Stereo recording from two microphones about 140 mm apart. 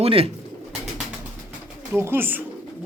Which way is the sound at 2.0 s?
15° right (ahead or behind).